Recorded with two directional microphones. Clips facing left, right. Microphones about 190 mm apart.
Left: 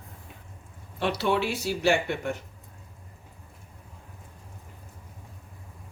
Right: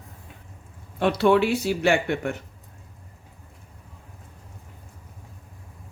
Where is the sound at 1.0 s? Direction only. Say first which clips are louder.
Right 7 dB; 55° right (ahead or behind).